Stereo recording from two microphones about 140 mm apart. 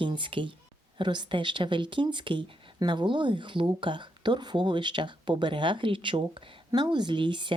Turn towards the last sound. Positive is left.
turn(degrees=-35)  # may be behind; listen again after turning